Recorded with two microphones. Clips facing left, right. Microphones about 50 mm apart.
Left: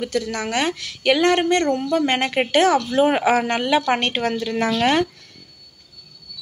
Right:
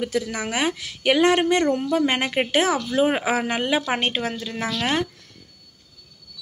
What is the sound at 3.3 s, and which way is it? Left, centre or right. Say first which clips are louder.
Speech: left 4 dB; centre.